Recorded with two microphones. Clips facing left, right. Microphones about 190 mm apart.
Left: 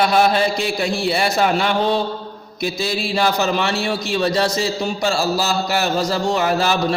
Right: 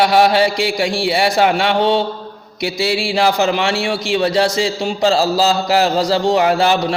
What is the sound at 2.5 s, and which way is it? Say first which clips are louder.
Mantra: right 2 dB; 90° right.